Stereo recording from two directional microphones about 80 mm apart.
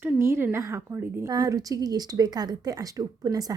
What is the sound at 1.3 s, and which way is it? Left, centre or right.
Speech, right.